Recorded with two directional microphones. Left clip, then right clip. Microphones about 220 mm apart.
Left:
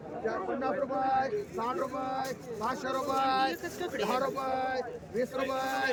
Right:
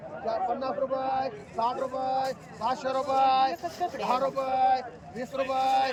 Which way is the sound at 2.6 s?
10° left (ahead or behind).